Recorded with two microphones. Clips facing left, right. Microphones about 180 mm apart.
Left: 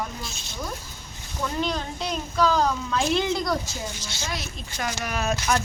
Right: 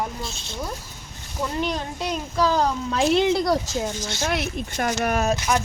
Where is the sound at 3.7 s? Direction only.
55° right (ahead or behind).